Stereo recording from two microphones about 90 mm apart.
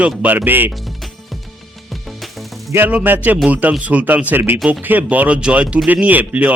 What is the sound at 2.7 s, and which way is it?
Speech, 20° right (ahead or behind).